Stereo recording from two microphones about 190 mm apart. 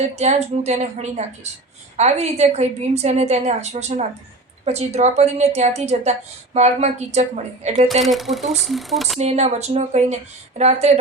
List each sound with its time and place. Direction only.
0.0 s a woman's voice: 35° right (ahead or behind)
8.0 s speech: centre (ahead or behind)
9.1 s a woman's voice: 35° right (ahead or behind)